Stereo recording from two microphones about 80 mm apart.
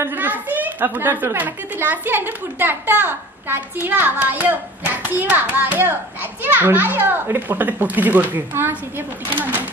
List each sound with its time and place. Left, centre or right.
0.0 s a child's voice: right